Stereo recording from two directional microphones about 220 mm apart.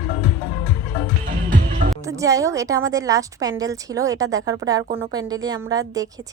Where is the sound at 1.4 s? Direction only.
40° right (ahead or behind).